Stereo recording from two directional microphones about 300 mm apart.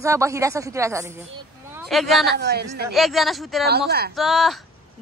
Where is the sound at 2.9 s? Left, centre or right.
Centre.